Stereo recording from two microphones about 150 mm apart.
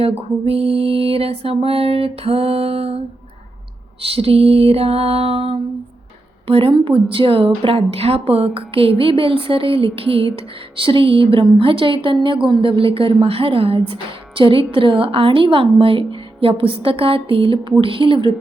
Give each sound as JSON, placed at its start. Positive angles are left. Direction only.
{"t": 0.2, "sound": "a woman's voice", "side_deg": -40}
{"t": 4.1, "sound": "a woman's voice", "side_deg": -40}